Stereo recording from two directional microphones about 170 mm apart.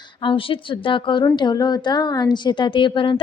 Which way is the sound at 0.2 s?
30° left (ahead or behind).